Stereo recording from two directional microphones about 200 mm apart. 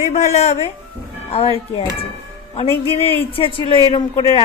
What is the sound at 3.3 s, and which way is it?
A woman's voice, 25° left (ahead or behind).